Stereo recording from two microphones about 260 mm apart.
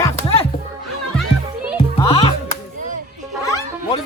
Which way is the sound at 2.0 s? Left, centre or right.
Left.